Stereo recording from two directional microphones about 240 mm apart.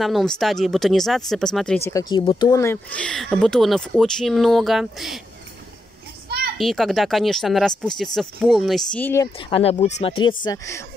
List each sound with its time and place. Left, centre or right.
0.0 s speech: centre
6.2 s children playing: right
6.6 s speech: centre
9.5 s speech: left